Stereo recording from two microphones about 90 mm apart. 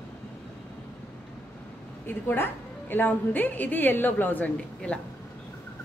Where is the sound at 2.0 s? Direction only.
25° left (ahead or behind).